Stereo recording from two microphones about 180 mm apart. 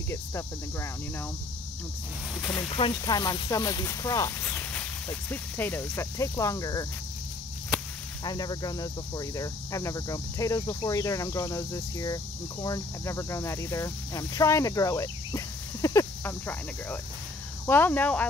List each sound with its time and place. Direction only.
0.1 s speech: 15° left (ahead or behind)
2.5 s cricket: 30° left (ahead or behind); by 4.8 s 10° left (ahead or behind)
5.3 s speech: 10° left (ahead or behind)
8.2 s cricket: 20° left (ahead or behind)
12.6 s speech: 15° left (ahead or behind)